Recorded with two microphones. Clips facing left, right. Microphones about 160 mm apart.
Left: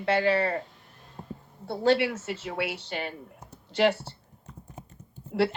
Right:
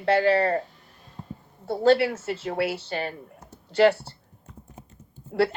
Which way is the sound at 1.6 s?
40° right (ahead or behind).